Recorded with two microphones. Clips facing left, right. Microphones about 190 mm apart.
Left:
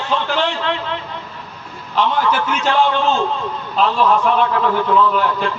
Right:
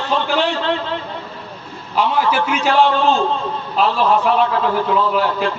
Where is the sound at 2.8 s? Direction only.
35° right (ahead or behind).